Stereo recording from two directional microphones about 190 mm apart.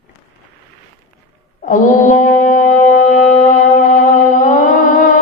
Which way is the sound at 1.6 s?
40° left (ahead or behind).